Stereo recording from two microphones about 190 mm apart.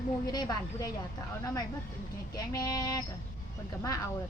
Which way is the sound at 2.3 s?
20° left (ahead or behind).